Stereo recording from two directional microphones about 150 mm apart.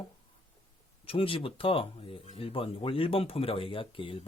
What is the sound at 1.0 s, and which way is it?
Speech, 35° left (ahead or behind).